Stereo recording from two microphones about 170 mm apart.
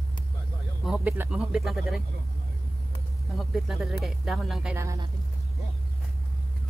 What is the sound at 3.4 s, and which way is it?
Speech, centre (ahead or behind).